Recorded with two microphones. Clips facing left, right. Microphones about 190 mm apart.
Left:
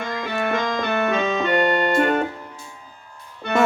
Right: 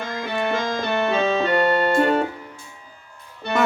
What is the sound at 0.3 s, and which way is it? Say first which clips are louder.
Music: even; 30° right (ahead or behind).